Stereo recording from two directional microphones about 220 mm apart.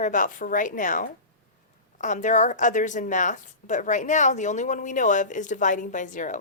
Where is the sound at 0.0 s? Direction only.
35° left (ahead or behind).